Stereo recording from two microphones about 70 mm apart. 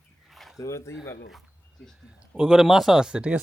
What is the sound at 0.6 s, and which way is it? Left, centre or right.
Speech, left.